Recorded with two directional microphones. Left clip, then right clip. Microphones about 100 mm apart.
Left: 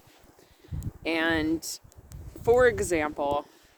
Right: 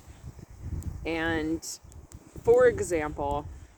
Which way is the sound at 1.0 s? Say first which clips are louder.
Left 3 dB; 35° left (ahead or behind).